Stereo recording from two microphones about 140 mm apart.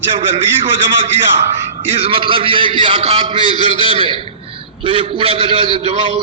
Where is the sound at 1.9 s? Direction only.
40° right (ahead or behind).